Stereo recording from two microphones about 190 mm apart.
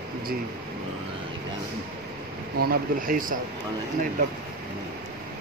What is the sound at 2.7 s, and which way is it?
Speech, 45° right (ahead or behind).